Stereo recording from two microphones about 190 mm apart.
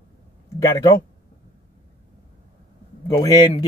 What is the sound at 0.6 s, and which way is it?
Speech, 15° left (ahead or behind).